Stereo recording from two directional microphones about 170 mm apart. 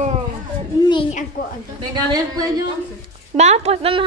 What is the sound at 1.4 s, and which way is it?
Speech, 55° left (ahead or behind).